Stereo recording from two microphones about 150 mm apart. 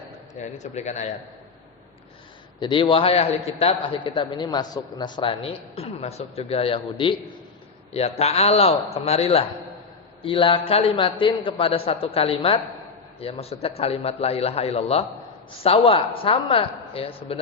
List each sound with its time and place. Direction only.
0.3 s a man's voice: 50° left (ahead or behind)
2.6 s a man's voice: 35° left (ahead or behind)